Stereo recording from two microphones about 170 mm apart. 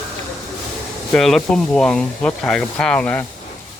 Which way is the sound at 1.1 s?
Centre (ahead or behind).